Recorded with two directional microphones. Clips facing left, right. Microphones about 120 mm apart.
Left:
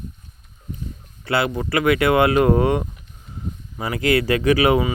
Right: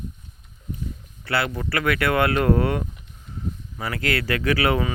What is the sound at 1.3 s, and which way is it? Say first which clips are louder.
Speech: left 4 dB; 20° left (ahead or behind).